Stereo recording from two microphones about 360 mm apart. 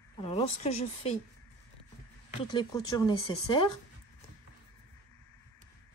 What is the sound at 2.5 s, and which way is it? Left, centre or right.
Speech, centre.